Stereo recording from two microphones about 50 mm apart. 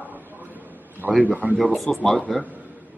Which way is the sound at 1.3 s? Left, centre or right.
Right.